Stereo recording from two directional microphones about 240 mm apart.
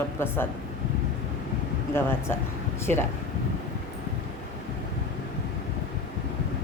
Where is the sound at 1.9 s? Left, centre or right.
Centre.